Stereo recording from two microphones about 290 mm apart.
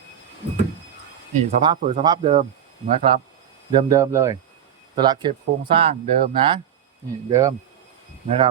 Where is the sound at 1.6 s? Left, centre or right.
Centre.